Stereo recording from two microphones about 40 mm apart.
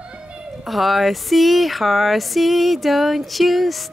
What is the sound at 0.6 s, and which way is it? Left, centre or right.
Speech, centre.